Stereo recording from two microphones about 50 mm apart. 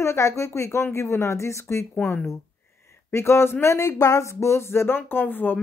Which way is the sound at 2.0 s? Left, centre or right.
Left.